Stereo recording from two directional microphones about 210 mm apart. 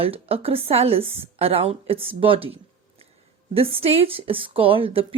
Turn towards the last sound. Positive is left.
turn(degrees=-25)  # may be behind; listen again after turning